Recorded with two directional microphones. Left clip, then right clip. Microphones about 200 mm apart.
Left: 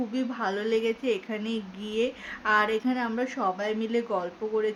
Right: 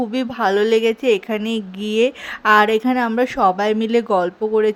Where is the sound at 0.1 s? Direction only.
45° right (ahead or behind).